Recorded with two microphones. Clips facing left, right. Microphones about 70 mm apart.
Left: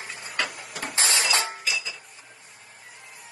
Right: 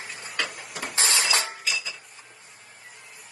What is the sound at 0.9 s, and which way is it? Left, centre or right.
Printer, right.